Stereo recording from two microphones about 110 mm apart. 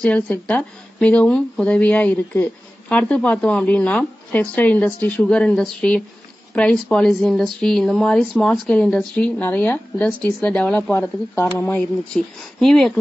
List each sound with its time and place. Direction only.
0.0 s speech: 10° left (ahead or behind)
10.9 s speech: 25° left (ahead or behind)
11.7 s speech: 5° left (ahead or behind)